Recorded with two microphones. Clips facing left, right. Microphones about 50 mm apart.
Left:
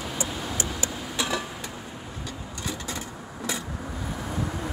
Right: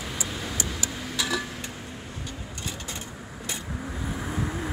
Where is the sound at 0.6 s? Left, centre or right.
Left.